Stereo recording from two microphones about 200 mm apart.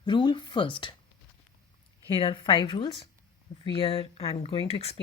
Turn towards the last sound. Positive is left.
turn(degrees=30)  # may be behind; listen again after turning